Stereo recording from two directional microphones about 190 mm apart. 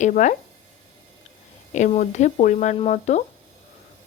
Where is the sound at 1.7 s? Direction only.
40° left (ahead or behind).